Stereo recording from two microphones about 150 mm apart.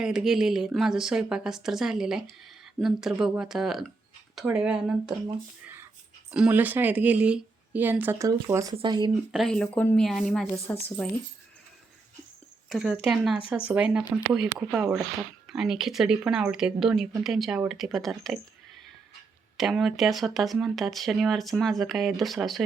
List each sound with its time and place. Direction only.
0.0 s speech: 5° right (ahead or behind)
5.6 s whispering: 15° right (ahead or behind)
6.3 s a woman's voice: 10° right (ahead or behind); by 9.1 s 30° right (ahead or behind)
9.3 s speech: centre (ahead or behind)
10.4 s speech: 15° left (ahead or behind)
12.6 s a woman's voice: centre (ahead or behind)
19.5 s speech: centre (ahead or behind)